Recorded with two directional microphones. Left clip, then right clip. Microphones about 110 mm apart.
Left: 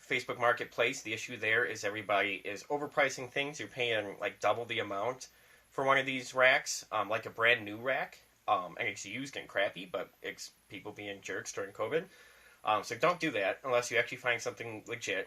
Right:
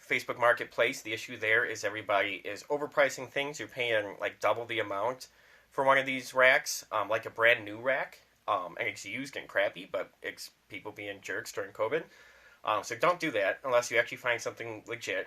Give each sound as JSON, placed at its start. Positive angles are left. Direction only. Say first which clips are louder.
{"t": 0.1, "sound": "speech", "louder": "right 4 dB", "side_deg": -35}